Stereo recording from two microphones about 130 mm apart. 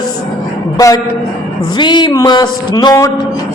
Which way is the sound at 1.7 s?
35° left (ahead or behind).